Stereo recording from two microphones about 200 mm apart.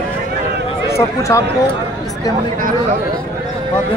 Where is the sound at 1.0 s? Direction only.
15° left (ahead or behind).